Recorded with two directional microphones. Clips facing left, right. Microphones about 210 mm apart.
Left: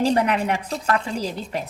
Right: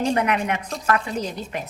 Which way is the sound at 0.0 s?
35° left (ahead or behind).